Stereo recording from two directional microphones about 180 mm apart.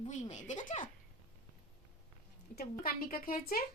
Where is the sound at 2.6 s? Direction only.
55° left (ahead or behind).